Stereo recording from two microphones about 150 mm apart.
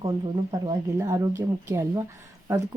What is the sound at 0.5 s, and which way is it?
Speech, 25° right (ahead or behind).